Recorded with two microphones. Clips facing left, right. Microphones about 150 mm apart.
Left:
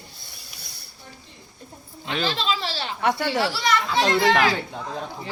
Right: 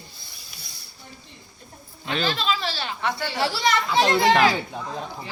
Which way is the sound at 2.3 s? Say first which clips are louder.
Even; 30° left (ahead or behind).